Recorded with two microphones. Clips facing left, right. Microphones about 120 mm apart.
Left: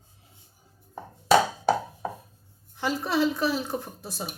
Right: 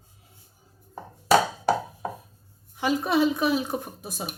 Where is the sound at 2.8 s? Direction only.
15° right (ahead or behind).